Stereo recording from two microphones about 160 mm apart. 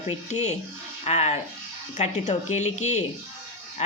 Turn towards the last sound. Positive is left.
turn(degrees=45)  # may be behind; listen again after turning